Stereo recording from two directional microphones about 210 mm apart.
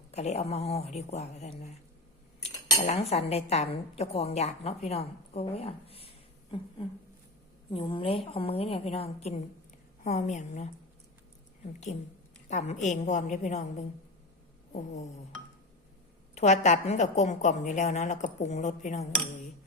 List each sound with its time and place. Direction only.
0.1 s a woman's voice: 30° left (ahead or behind)
2.8 s a woman's voice: 30° left (ahead or behind)
16.3 s a woman's voice: 35° left (ahead or behind)